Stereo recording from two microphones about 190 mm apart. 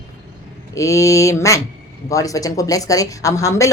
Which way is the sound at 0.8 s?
15° left (ahead or behind).